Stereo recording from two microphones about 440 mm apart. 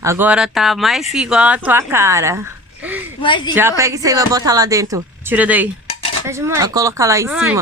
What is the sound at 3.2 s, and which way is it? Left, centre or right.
Speech, centre.